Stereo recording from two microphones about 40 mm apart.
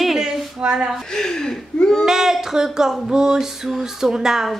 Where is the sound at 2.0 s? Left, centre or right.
Centre.